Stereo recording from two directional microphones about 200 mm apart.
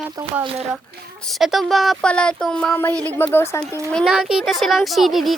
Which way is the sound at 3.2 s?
10° left (ahead or behind).